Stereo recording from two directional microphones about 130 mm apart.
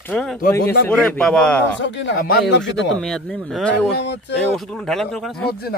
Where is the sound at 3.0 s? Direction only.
5° left (ahead or behind).